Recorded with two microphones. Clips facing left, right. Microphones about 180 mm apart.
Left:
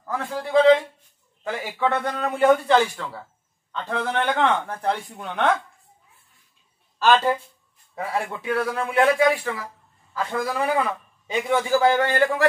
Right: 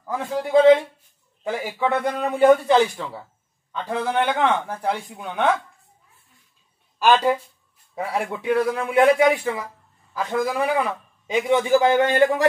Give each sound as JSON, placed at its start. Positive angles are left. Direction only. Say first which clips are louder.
{"t": 0.0, "sound": "a man's voice", "louder": "right 3 dB", "side_deg": -20}
{"t": 7.0, "sound": "a man's voice", "louder": "right 1 dB", "side_deg": -15}